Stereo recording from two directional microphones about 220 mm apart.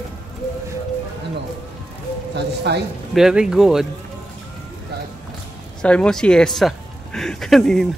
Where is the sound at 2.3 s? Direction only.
50° right (ahead or behind).